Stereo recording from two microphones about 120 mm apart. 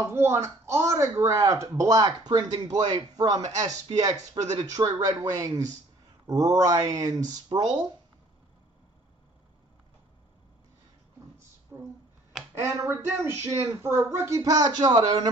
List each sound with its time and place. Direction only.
0.0 s speech: 20° right (ahead or behind); by 7.9 s 40° right (ahead or behind)
11.7 s speech: 20° right (ahead or behind)